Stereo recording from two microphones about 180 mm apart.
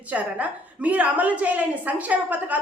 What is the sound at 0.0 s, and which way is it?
A woman's voice, 10° right (ahead or behind).